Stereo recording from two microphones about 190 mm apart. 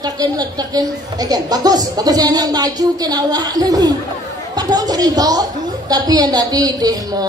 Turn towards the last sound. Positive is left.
turn(degrees=-20)  # may be behind; listen again after turning